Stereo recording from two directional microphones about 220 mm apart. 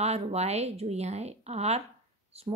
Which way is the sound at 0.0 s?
30° right (ahead or behind).